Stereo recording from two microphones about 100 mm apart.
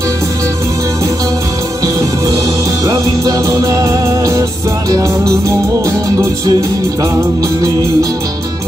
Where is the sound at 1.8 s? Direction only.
35° right (ahead or behind).